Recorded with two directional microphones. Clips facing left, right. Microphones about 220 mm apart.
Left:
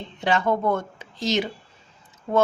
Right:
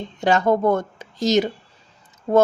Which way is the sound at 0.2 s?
45° right (ahead or behind).